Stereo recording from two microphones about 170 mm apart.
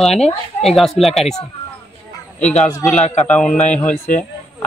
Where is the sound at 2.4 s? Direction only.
40° left (ahead or behind).